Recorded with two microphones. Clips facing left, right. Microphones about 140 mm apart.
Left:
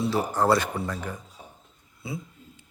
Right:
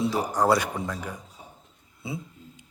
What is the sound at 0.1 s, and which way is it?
Speech, 15° right (ahead or behind).